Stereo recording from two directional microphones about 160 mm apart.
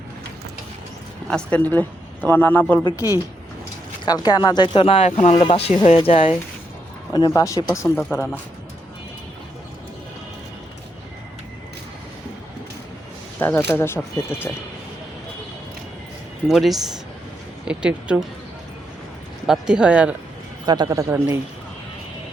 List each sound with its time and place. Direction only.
1.3 s a man's voice: 5° left (ahead or behind)
2.8 s speech: 20° left (ahead or behind)
7.1 s a man's voice: 25° left (ahead or behind)
13.4 s a man's voice: 10° left (ahead or behind)
16.5 s speech: centre (ahead or behind)
19.5 s speech: 5° right (ahead or behind)
20.7 s a man's voice: 25° right (ahead or behind)